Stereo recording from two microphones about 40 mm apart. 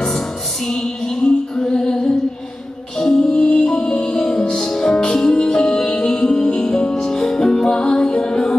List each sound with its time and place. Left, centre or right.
1.2 s music: centre
3.3 s music: left